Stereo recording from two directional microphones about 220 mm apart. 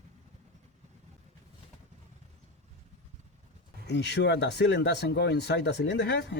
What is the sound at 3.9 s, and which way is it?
Speech, 50° left (ahead or behind).